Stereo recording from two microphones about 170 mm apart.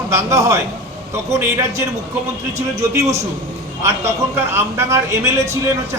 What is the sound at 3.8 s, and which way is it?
A man's voice, 15° right (ahead or behind).